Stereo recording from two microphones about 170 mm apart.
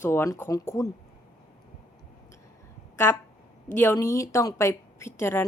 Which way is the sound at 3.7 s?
15° left (ahead or behind).